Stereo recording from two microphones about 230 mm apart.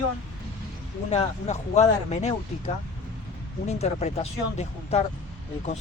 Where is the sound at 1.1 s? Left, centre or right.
Left.